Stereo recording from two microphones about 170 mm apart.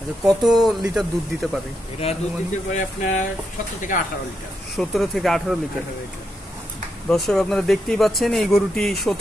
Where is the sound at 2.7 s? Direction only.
45° left (ahead or behind).